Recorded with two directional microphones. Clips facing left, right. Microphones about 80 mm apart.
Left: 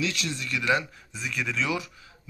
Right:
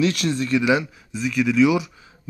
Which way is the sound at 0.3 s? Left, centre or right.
Right.